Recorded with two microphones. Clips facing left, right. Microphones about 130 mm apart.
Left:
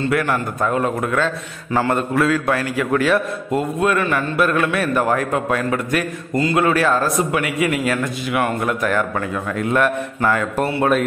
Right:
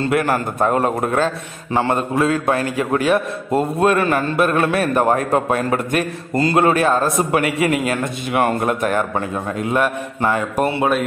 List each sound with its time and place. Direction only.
0.1 s a man's voice: 30° right (ahead or behind)
6.7 s a man's voice: 25° right (ahead or behind)
9.6 s a man's voice: 20° right (ahead or behind)